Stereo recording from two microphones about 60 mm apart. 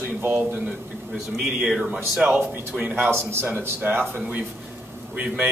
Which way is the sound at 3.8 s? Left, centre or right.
Right.